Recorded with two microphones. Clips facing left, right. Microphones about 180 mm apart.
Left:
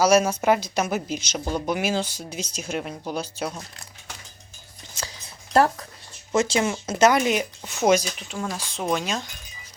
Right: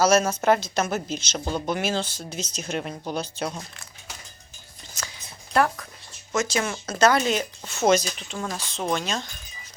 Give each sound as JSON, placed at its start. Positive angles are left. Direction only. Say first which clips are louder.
{"t": 0.0, "sound": "a woman's voice", "louder": "left 1 dB", "side_deg": 10}
{"t": 5.0, "sound": "a sound", "louder": "left 2 dB", "side_deg": 25}
{"t": 5.5, "sound": "a woman's voice", "louder": "left 3 dB", "side_deg": 35}